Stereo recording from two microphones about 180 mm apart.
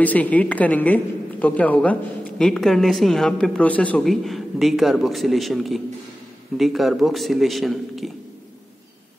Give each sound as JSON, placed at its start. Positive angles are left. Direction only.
{"t": 0.0, "sound": "a woman's voice", "side_deg": 10}